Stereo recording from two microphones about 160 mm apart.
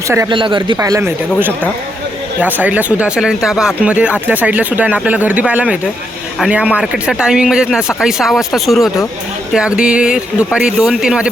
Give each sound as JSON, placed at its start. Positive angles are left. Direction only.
{"t": 0.3, "sound": "speech", "side_deg": -30}
{"t": 0.8, "sound": "speech", "side_deg": -20}